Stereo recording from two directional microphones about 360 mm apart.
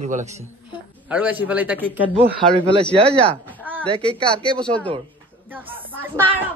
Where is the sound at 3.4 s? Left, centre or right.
Centre.